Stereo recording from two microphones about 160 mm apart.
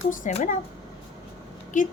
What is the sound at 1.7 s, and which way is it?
Speech, 50° left (ahead or behind).